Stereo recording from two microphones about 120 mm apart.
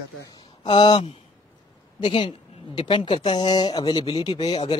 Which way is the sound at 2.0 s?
50° left (ahead or behind).